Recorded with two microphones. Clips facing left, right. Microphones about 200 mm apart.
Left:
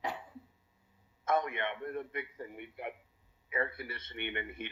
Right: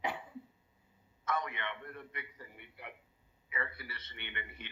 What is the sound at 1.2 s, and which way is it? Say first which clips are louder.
A man's voice: left 6 dB; 50° left (ahead or behind).